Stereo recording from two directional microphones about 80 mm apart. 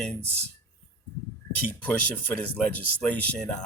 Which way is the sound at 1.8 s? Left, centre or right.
Centre.